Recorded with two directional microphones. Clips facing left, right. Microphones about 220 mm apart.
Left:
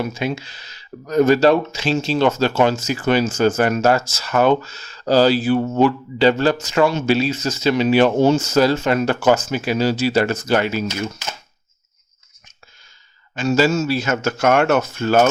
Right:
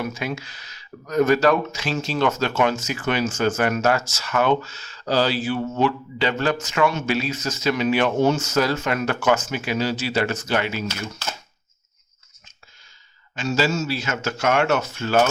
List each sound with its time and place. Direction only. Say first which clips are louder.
0.0 s speech: left 4 dB; 25° left (ahead or behind)
13.3 s speech: left 6 dB; 50° left (ahead or behind)